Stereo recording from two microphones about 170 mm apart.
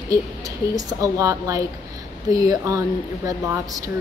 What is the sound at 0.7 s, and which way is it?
A woman's voice, 20° right (ahead or behind).